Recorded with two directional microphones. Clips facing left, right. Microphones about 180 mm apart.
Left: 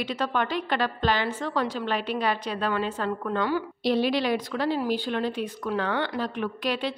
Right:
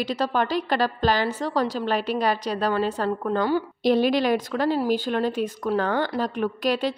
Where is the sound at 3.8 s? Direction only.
45° right (ahead or behind).